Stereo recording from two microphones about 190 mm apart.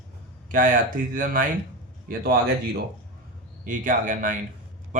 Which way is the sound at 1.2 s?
45° right (ahead or behind).